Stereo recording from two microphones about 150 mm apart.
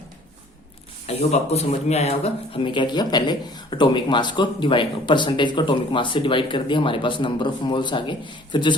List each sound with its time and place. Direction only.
1.0 s speech: 45° left (ahead or behind)